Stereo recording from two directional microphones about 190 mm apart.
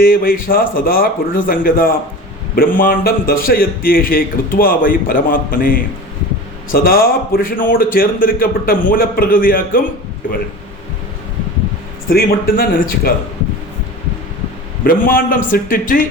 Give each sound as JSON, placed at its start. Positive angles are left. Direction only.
{"t": 0.0, "sound": "a man's voice", "side_deg": 50}
{"t": 12.0, "sound": "a man's voice", "side_deg": 50}
{"t": 14.8, "sound": "a man's voice", "side_deg": 50}